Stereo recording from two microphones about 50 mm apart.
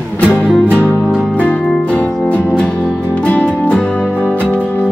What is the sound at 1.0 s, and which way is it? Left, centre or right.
Music, centre.